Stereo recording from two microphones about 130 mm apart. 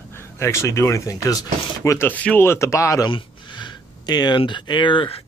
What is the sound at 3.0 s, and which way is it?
Speech, 35° left (ahead or behind).